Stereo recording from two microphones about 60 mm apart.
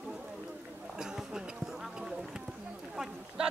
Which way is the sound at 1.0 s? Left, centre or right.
Centre.